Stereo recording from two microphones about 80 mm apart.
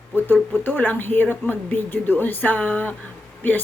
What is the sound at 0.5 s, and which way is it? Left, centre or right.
A woman's voice, left.